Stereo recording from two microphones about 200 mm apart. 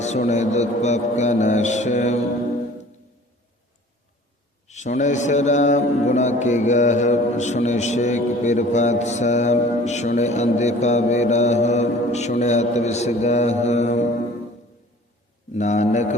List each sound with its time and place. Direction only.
0.0 s mantra: 35° left (ahead or behind)
4.7 s mantra: 35° left (ahead or behind)
15.5 s mantra: 35° left (ahead or behind)